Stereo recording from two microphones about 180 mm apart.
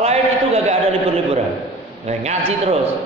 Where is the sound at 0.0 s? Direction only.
35° right (ahead or behind).